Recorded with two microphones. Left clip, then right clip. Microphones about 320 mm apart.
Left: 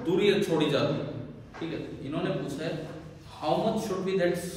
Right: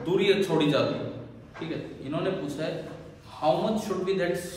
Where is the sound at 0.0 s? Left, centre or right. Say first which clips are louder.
Right 1 dB; centre.